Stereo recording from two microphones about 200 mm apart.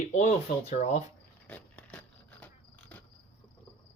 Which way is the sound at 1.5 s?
5° left (ahead or behind).